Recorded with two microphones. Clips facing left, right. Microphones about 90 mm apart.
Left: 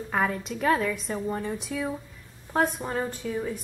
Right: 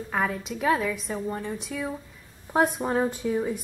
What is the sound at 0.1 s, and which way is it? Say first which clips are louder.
A woman's voice: left 1 dB; centre (ahead or behind).